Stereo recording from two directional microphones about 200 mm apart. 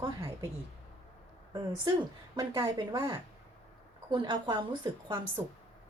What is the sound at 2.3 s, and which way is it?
A woman's voice, 20° right (ahead or behind).